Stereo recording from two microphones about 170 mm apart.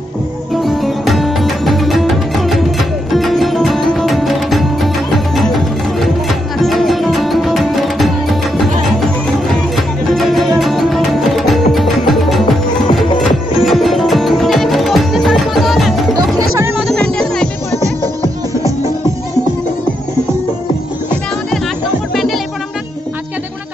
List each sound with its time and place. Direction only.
0.6 s music: centre (ahead or behind)
16.3 s music: 15° right (ahead or behind)
16.8 s music: 5° left (ahead or behind)
22.1 s music: centre (ahead or behind)